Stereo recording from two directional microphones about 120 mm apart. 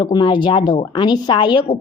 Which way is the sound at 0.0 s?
40° left (ahead or behind).